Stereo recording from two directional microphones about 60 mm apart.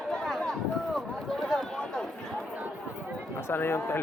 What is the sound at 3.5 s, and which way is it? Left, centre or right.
Speech, left.